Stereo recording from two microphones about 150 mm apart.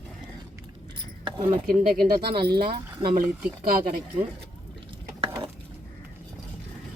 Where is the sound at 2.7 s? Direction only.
40° right (ahead or behind).